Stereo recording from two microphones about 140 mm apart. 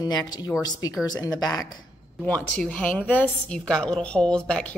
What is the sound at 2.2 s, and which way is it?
A woman's voice, 10° left (ahead or behind).